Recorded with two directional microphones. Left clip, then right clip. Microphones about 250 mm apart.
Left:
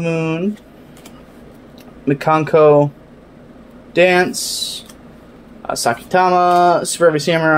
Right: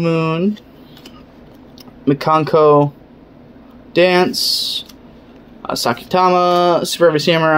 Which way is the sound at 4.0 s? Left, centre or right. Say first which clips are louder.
Even; centre.